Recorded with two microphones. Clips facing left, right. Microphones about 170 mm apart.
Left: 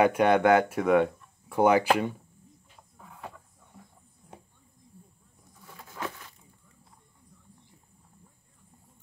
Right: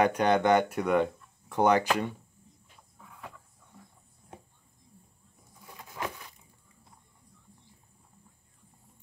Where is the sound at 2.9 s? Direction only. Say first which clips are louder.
Left 3 dB; 40° left (ahead or behind).